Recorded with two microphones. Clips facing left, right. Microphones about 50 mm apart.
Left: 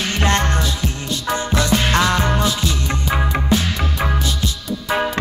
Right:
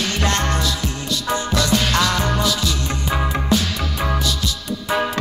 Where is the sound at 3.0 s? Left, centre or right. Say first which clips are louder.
Left 1 dB; centre.